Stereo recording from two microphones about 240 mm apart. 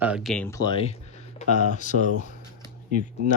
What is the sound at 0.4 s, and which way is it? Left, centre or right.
Speech, centre.